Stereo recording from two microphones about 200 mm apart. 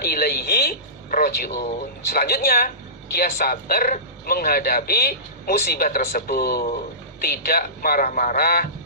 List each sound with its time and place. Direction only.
0.0 s a man's voice: 50° left (ahead or behind)